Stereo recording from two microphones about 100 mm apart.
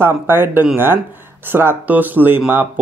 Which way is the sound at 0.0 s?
20° right (ahead or behind).